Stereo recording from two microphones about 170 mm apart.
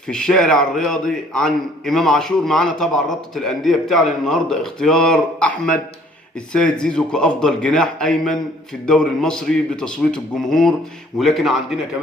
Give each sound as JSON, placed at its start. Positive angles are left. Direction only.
{"t": 0.1, "sound": "a man's voice", "side_deg": 5}